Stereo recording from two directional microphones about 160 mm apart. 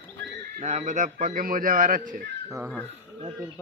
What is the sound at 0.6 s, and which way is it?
A man's voice, 45° right (ahead or behind).